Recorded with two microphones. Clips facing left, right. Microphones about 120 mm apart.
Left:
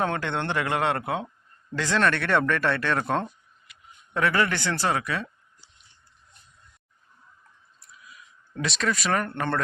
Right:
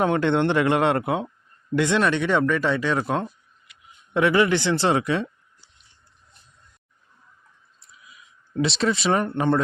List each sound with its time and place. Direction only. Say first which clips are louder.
0.0 s speech: right 7 dB; 20° right (ahead or behind)
2.0 s speech: left 2 dB; 10° right (ahead or behind)
4.1 s speech: right 5 dB; 15° right (ahead or behind)
8.8 s speech: right 3 dB; 25° right (ahead or behind)
9.2 s speech: right 6 dB; 15° right (ahead or behind)